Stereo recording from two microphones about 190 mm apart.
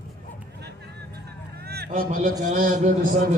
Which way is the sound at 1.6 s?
55° right (ahead or behind).